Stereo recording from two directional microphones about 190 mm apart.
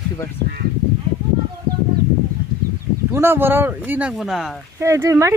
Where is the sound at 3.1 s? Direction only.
10° right (ahead or behind).